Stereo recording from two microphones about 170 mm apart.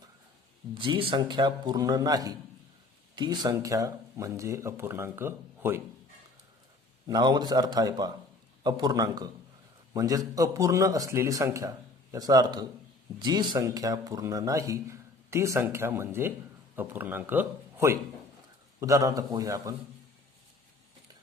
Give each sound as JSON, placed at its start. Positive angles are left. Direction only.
{"t": 0.7, "sound": "a man's voice", "side_deg": -30}
{"t": 7.1, "sound": "a man's voice", "side_deg": -25}